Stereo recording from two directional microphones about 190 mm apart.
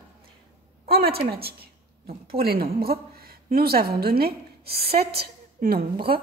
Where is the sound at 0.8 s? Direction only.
55° right (ahead or behind).